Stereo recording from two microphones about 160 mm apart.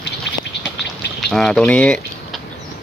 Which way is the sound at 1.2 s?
5° left (ahead or behind).